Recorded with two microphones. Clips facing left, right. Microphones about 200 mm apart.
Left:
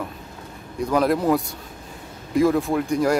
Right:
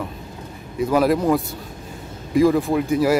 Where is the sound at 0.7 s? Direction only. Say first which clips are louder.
Right 2 dB; 5° right (ahead or behind).